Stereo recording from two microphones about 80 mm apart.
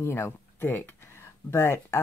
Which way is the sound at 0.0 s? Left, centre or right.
Left.